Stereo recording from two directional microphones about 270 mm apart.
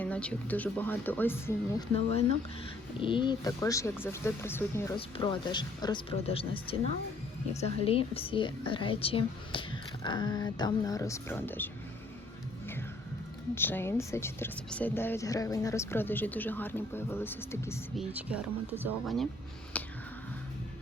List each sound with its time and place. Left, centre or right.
0.0 s speech: centre
3.0 s speech: centre
13.6 s speech: centre
18.0 s speech: centre
19.7 s finger snapping: centre